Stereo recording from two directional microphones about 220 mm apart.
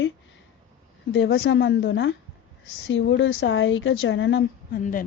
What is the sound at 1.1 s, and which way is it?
Speech, 55° left (ahead or behind).